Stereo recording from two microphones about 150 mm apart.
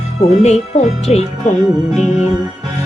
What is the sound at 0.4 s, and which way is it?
Music, 45° left (ahead or behind).